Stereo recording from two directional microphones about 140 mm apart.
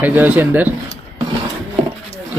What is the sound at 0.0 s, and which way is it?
Speech, 10° right (ahead or behind).